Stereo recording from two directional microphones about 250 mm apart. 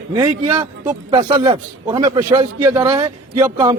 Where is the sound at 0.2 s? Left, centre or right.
Centre.